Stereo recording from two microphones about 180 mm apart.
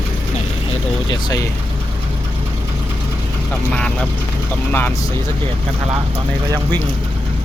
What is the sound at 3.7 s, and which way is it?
Speech, 5° left (ahead or behind).